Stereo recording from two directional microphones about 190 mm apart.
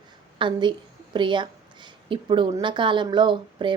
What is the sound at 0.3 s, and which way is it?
A woman's voice, 25° right (ahead or behind).